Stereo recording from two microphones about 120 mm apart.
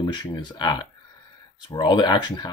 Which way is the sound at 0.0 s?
35° left (ahead or behind).